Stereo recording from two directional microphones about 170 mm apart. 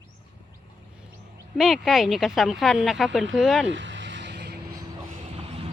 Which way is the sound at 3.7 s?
90° right.